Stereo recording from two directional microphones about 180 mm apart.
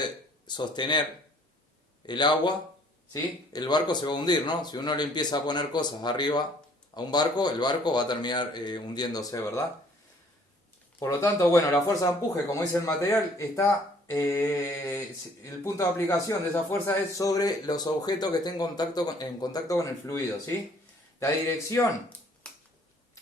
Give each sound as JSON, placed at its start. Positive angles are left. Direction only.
{"t": 0.0, "sound": "speech", "side_deg": 25}
{"t": 2.0, "sound": "a man's voice", "side_deg": 25}
{"t": 11.0, "sound": "a man's voice", "side_deg": 15}
{"t": 14.1, "sound": "a man's voice", "side_deg": 15}
{"t": 22.4, "sound": "finger snapping", "side_deg": 5}